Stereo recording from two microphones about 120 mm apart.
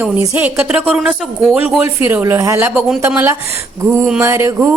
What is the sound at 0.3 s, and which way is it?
Speech, 10° right (ahead or behind).